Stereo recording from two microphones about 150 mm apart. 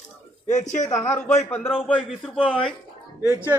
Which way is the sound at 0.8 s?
20° left (ahead or behind).